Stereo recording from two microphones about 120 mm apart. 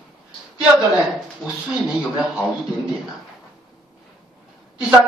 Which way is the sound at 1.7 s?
5° right (ahead or behind).